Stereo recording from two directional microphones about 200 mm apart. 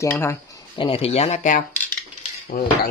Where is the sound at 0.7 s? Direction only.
25° left (ahead or behind); by 2.7 s 45° left (ahead or behind).